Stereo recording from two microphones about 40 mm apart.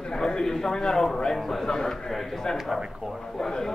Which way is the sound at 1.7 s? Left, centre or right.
Centre.